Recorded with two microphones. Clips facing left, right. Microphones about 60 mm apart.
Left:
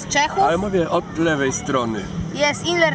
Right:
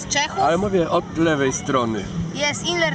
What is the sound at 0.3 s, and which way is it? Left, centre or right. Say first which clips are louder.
Speech: right 2 dB; centre.